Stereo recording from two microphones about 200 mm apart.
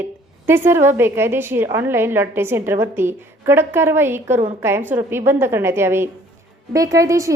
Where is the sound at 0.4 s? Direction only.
10° right (ahead or behind).